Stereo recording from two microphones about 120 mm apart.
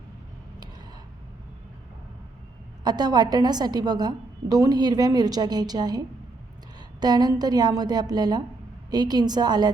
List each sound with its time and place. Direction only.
2.8 s a woman's voice: 35° right (ahead or behind)